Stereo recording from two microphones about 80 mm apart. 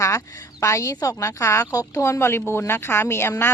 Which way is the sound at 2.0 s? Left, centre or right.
Left.